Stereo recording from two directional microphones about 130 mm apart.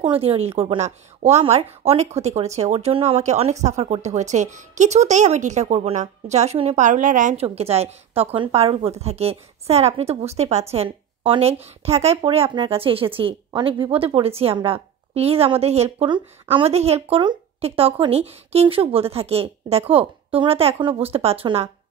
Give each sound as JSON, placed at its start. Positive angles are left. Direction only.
{"t": 0.0, "sound": "speech", "side_deg": -45}
{"t": 7.3, "sound": "a woman's voice", "side_deg": -50}